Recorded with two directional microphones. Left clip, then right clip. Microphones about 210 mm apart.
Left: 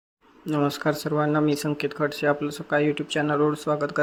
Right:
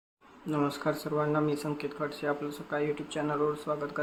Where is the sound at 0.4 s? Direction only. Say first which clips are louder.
Left 6 dB; 30° left (ahead or behind).